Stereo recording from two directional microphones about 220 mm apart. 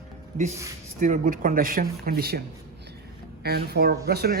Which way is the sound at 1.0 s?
35° right (ahead or behind).